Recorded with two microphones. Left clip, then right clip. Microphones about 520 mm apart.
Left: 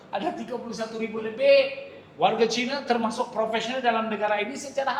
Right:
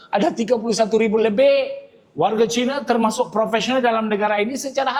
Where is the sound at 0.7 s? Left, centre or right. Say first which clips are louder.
Right 15 dB; right.